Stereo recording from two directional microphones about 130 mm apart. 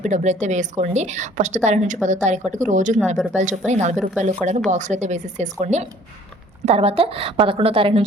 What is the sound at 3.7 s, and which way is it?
Speech, 60° right (ahead or behind).